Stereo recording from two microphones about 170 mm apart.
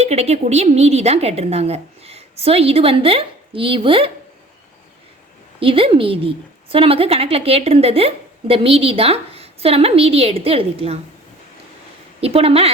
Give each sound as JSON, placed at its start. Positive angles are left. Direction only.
{"t": 0.0, "sound": "a woman's voice", "side_deg": -40}
{"t": 5.5, "sound": "a woman's voice", "side_deg": -30}
{"t": 12.2, "sound": "a woman's voice", "side_deg": -35}